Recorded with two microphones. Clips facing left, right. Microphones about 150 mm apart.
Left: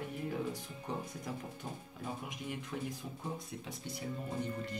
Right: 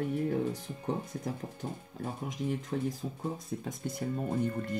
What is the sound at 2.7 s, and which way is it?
Speech, 35° right (ahead or behind).